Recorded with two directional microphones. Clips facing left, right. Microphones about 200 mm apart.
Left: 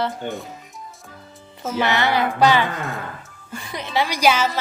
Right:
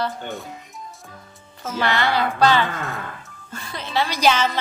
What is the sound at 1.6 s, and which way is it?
Speech, 20° left (ahead or behind).